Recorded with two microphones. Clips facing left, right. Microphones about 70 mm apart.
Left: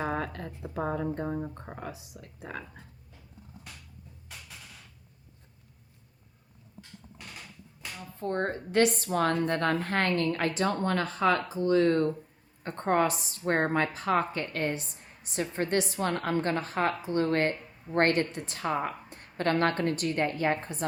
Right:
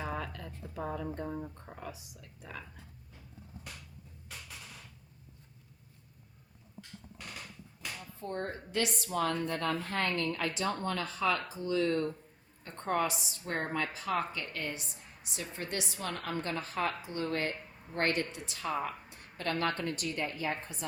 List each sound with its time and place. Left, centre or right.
0.0 s a sound: left
2.5 s a woman's voice: left
8.2 s a woman's voice: left